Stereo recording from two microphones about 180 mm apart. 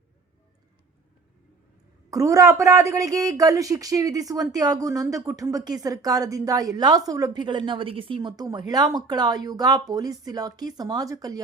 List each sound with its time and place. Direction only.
2.0 s speech: 20° right (ahead or behind)